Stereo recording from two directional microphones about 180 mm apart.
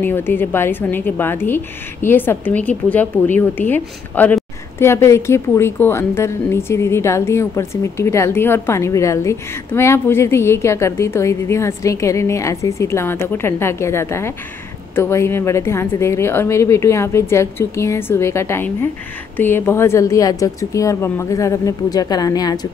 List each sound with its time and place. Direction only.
0.0 s a woman's voice: 10° left (ahead or behind)